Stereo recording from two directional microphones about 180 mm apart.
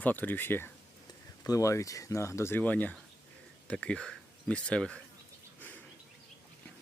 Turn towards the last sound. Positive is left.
turn(degrees=5)  # may be behind; listen again after turning